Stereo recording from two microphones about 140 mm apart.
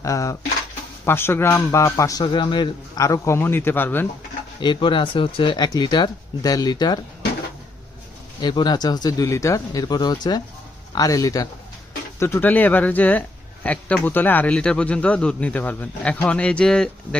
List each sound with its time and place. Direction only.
0.0 s speech: 25° left (ahead or behind)
3.0 s speech: 20° left (ahead or behind)
4.6 s speech: 35° left (ahead or behind)
8.4 s speech: 30° left (ahead or behind); by 17.2 s 5° left (ahead or behind)